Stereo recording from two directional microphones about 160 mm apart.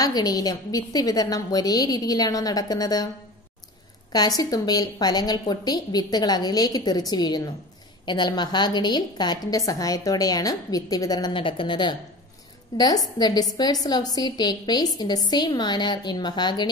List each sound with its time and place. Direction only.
0.0 s a woman's voice: 25° left (ahead or behind)
4.4 s a woman's voice: 25° left (ahead or behind)